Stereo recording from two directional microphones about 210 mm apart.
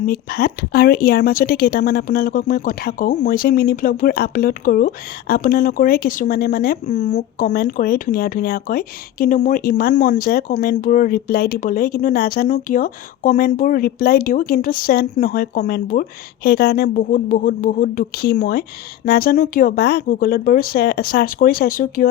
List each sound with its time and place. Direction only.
0.0 s speech: 45° left (ahead or behind)